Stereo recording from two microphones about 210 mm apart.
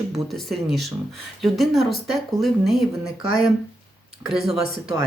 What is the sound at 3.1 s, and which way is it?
Speech, 80° left.